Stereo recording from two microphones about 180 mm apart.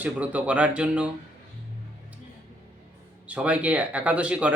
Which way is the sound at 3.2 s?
5° right (ahead or behind).